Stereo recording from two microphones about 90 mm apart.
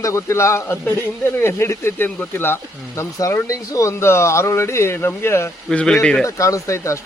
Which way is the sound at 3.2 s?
40° left (ahead or behind).